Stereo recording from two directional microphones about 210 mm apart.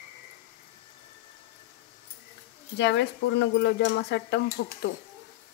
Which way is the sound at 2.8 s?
55° left (ahead or behind).